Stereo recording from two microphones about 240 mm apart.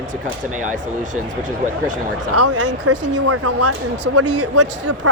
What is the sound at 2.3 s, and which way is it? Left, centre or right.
Speech, right.